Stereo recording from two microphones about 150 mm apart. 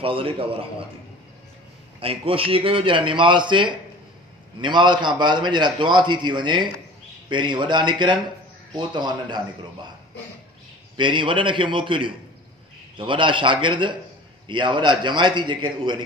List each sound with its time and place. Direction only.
0.0 s a man's voice: 35° right (ahead or behind)
2.0 s a man's voice: 40° right (ahead or behind)
11.0 s a man's voice: 35° right (ahead or behind)